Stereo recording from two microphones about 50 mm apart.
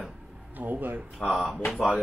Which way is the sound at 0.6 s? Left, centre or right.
Right.